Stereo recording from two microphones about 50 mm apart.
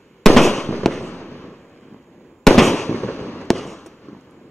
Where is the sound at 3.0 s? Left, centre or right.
Left.